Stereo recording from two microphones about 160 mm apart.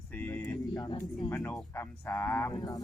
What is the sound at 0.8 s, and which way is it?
Speech, 25° left (ahead or behind).